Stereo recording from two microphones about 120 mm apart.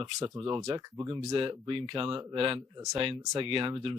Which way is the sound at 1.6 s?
45° right (ahead or behind).